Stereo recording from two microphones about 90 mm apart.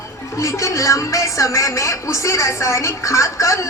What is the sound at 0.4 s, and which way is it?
Speech, 35° left (ahead or behind).